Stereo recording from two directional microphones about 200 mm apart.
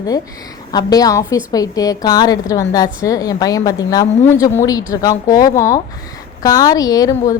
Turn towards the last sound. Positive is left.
turn(degrees=15)  # may be behind; listen again after turning